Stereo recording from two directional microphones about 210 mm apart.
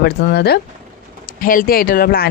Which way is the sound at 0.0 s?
50° left (ahead or behind).